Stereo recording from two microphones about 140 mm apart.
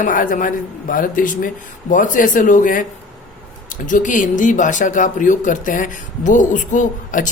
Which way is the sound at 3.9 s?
70° left (ahead or behind).